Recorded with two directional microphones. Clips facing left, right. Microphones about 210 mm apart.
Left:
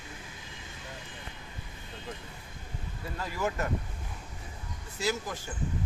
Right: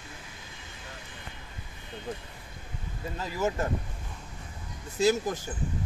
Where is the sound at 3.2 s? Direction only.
20° right (ahead or behind).